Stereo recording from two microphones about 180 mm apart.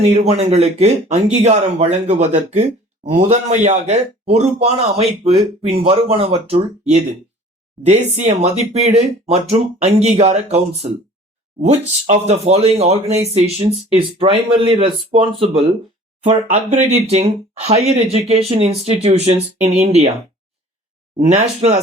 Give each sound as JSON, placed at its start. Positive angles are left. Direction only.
{"t": 0.1, "sound": "speech", "side_deg": -35}
{"t": 21.2, "sound": "speech", "side_deg": -40}